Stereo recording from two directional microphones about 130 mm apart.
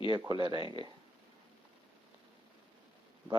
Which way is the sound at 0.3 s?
35° right (ahead or behind).